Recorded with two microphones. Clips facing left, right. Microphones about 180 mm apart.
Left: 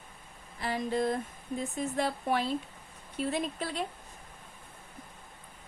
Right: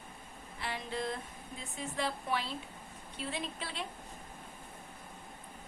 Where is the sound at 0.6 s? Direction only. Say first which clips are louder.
Left 8 dB; 40° left (ahead or behind).